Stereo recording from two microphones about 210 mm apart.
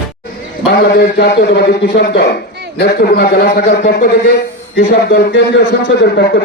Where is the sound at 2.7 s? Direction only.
50° left (ahead or behind).